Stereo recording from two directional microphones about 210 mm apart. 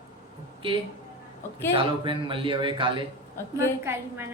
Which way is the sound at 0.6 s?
25° right (ahead or behind).